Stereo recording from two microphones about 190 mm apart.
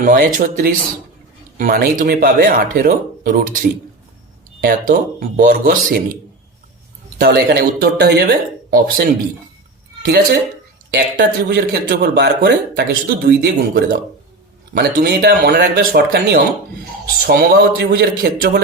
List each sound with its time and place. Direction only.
0.0 s speech: 45° right (ahead or behind)
4.6 s speech: 50° right (ahead or behind)
7.2 s speech: 60° right (ahead or behind)
10.9 s speech: 60° right (ahead or behind)